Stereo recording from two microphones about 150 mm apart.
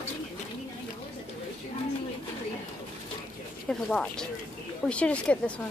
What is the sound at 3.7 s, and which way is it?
Speech, 5° left (ahead or behind).